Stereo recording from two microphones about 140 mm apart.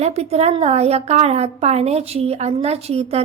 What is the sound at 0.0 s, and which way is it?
A woman's voice, 50° right (ahead or behind).